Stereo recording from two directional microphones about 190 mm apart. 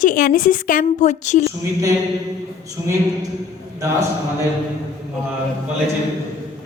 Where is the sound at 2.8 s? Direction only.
15° right (ahead or behind).